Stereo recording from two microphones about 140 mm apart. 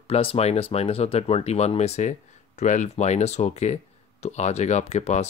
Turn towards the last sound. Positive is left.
turn(degrees=50)  # may be behind; listen again after turning